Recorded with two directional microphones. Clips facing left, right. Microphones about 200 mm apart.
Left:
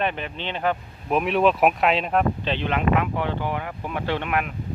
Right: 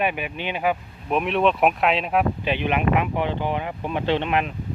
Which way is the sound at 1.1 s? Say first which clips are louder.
Left 1 dB; centre (ahead or behind).